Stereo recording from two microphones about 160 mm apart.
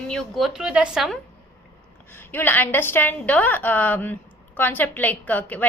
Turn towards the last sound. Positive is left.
turn(degrees=10)  # may be behind; listen again after turning